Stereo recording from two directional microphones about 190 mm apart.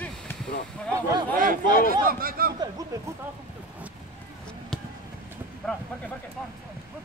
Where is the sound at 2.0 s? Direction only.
50° right (ahead or behind).